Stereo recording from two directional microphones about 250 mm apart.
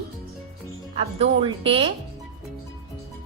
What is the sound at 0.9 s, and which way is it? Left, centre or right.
Speech, right.